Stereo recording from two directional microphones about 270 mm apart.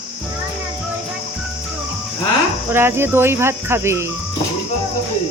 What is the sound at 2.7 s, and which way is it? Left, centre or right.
Cricket, centre.